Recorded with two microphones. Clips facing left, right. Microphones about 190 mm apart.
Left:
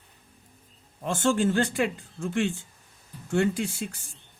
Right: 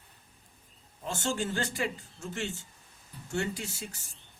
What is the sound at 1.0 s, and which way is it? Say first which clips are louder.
Speech: left 9 dB; 55° left (ahead or behind).